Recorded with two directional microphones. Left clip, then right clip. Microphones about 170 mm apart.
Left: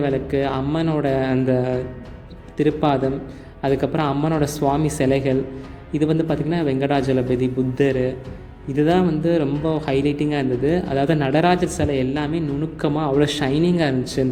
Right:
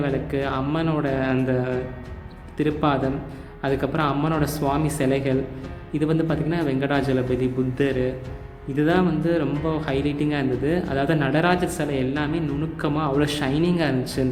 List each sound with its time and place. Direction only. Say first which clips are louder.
0.0 s speech: left 4 dB; 25° left (ahead or behind)